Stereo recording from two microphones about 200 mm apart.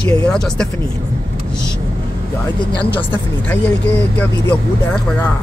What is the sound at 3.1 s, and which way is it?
Speech, 10° left (ahead or behind).